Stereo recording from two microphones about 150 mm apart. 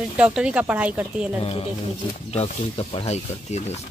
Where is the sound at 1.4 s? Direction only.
40° left (ahead or behind).